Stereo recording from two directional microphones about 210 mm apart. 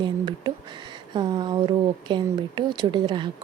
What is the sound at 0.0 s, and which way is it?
Speech, 20° right (ahead or behind).